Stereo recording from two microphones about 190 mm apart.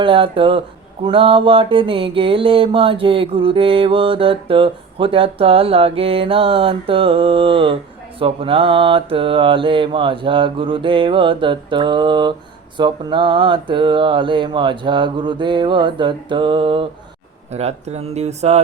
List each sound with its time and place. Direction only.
0.0 s mantra: 25° right (ahead or behind)
17.5 s speech: 35° right (ahead or behind)